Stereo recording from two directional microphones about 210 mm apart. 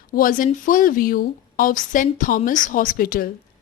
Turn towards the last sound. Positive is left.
turn(degrees=45)  # may be behind; listen again after turning